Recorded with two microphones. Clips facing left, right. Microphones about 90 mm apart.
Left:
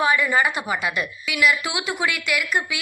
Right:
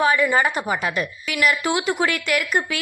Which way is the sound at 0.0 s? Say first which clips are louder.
Right 2 dB; 30° right (ahead or behind).